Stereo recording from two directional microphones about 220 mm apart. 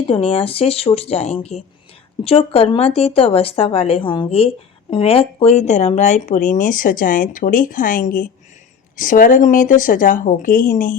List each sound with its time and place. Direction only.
0.0 s speech: 25° left (ahead or behind)